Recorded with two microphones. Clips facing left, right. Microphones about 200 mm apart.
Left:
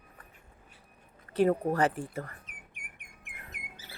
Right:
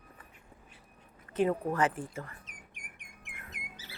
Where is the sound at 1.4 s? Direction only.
35° left (ahead or behind).